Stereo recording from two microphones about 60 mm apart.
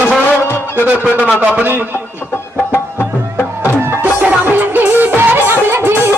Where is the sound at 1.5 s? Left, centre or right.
Right.